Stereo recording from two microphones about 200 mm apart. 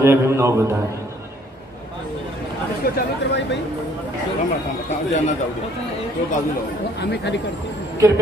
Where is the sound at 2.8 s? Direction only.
60° left (ahead or behind).